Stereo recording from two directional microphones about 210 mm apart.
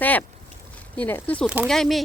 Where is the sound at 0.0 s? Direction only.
10° left (ahead or behind).